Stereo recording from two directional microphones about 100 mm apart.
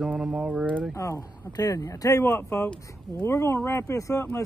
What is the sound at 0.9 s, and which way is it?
A man's voice, 35° left (ahead or behind).